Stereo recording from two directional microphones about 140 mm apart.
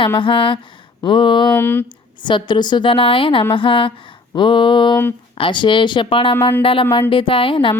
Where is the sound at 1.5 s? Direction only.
15° left (ahead or behind).